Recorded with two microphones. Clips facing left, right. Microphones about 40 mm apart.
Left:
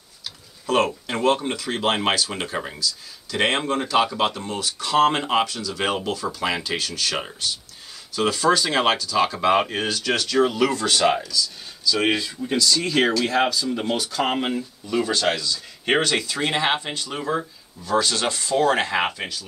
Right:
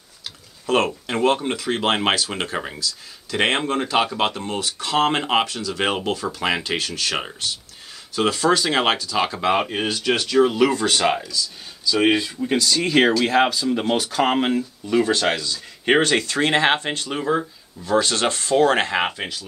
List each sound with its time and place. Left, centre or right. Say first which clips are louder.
0.7 s speech: right 1 dB; right
1.0 s speech: right 1 dB; centre; by 2.5 s right
2.5 s speech: right 1 dB; centre
3.3 s speech: right 1 dB; right
8.2 s speech: right 1 dB; right
8.5 s speech: right 1 dB; centre
9.5 s speech: left 1 dB; centre; by 17.1 s right
17.2 s speech: right 3 dB; centre
18.3 s speech: right 3 dB; right
19.1 s speech: right 1 dB; right